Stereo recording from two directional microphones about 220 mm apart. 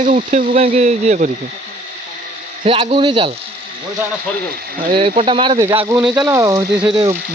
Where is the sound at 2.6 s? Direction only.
25° right (ahead or behind).